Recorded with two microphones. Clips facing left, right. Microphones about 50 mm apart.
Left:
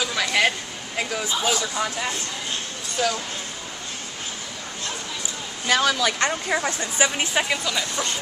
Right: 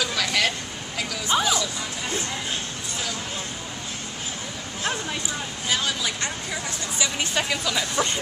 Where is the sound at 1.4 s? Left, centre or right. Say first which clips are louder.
Left 1 dB; left.